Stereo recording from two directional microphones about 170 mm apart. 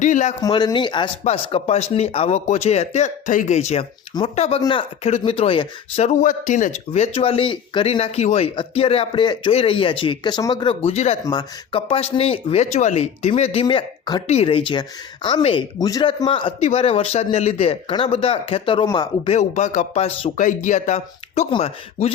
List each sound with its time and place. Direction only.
0.0 s speech: 45° left (ahead or behind)
0.4 s speech: 25° left (ahead or behind)
1.2 s speech: 40° left (ahead or behind)
11.3 s speech: 30° left (ahead or behind)
16.2 s speech: 35° left (ahead or behind)
19.3 s speech: 45° left (ahead or behind)
20.3 s speech: 50° left (ahead or behind)